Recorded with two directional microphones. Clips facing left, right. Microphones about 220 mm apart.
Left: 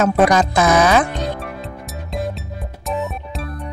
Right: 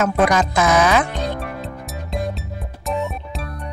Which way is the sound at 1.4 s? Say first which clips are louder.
Right 1 dB; centre (ahead or behind).